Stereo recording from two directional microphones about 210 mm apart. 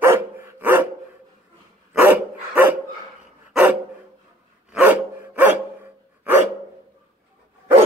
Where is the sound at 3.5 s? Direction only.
5° right (ahead or behind).